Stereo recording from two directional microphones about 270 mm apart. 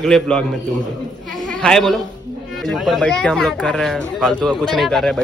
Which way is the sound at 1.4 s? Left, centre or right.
Centre.